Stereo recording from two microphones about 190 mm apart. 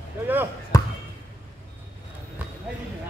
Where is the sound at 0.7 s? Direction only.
20° left (ahead or behind).